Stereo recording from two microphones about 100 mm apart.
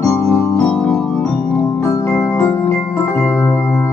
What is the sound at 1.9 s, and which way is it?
Music, 20° left (ahead or behind).